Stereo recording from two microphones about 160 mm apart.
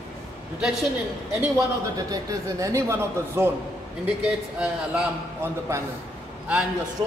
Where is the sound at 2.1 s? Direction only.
20° right (ahead or behind).